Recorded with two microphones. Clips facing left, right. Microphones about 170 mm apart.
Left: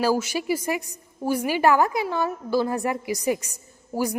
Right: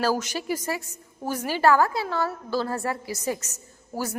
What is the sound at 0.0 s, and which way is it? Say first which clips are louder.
A woman's voice: left 3 dB; 10° left (ahead or behind).